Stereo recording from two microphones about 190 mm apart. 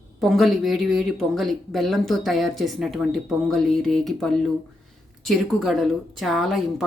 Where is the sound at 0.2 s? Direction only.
Centre (ahead or behind).